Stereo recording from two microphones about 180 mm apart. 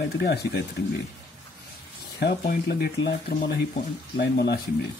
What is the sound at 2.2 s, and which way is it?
Speech, 65° left (ahead or behind).